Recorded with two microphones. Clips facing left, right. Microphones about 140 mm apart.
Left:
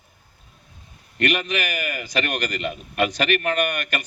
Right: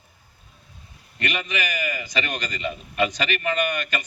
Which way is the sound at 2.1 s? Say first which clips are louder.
Left 3 dB; 60° left (ahead or behind).